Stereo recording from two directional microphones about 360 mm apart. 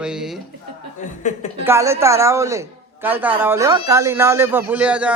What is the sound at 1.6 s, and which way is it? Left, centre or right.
A man's voice, centre.